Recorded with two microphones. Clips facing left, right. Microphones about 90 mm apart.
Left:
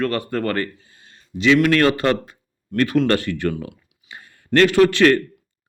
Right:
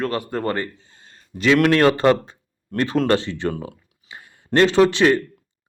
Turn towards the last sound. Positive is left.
turn(degrees=-20)  # may be behind; listen again after turning